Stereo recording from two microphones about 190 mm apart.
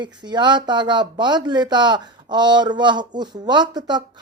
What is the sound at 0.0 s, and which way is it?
Speech, 25° right (ahead or behind).